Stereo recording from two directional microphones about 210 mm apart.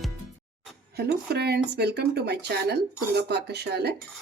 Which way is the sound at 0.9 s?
50° right (ahead or behind).